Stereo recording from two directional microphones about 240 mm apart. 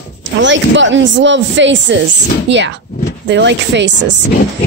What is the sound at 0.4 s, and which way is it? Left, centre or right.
Speech, right.